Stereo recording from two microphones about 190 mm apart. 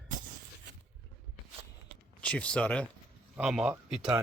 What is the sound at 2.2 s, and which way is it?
Speech, 5° left (ahead or behind).